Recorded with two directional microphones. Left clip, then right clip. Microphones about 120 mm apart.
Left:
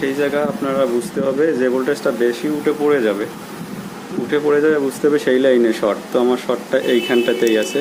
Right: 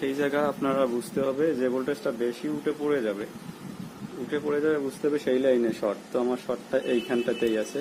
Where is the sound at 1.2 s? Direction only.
20° right (ahead or behind).